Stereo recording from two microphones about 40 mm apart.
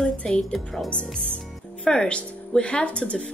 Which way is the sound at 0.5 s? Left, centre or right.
Centre.